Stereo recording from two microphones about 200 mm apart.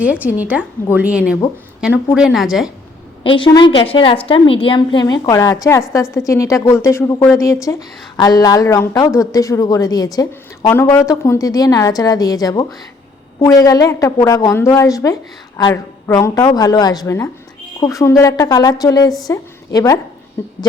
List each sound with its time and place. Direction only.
0.0 s a woman's voice: 5° right (ahead or behind)
3.2 s a woman's voice: 25° left (ahead or behind)